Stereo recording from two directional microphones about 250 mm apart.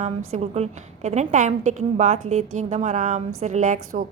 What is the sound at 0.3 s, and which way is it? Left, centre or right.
A woman's voice, right.